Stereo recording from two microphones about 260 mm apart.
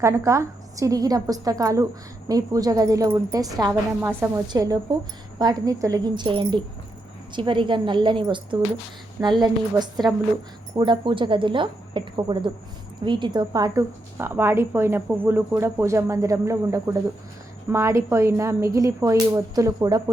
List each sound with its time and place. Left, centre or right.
0.0 s a woman's voice: centre